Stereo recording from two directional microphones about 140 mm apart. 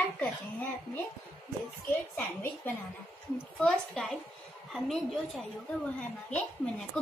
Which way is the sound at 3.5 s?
5° left (ahead or behind).